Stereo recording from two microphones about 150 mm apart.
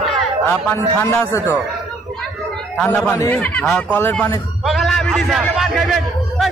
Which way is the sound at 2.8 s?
5° left (ahead or behind).